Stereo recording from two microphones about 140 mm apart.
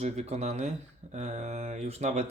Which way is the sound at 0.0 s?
50° right (ahead or behind).